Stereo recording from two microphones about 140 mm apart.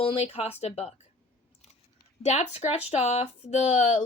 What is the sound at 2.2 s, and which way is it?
Speech, 50° left (ahead or behind).